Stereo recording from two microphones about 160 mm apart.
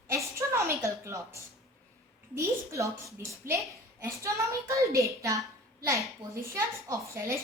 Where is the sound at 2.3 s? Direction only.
20° right (ahead or behind).